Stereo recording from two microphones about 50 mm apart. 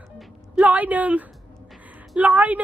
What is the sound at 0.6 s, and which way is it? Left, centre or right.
A woman's voice, right.